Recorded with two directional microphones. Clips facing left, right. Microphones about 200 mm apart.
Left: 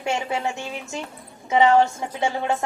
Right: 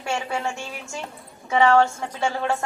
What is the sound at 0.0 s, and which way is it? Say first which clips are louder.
A woman's voice: left 2 dB; 20° left (ahead or behind).